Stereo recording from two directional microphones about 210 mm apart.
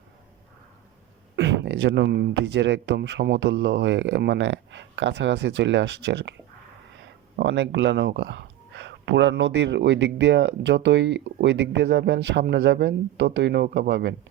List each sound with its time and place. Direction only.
1.4 s speech: 55° right (ahead or behind)